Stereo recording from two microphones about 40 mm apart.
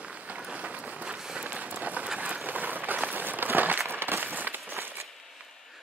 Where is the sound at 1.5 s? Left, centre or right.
Right.